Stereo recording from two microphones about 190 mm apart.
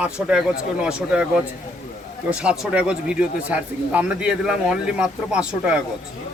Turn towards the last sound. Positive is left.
turn(degrees=-5)  # may be behind; listen again after turning